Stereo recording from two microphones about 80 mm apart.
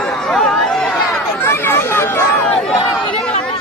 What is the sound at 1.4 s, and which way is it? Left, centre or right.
Speech, left.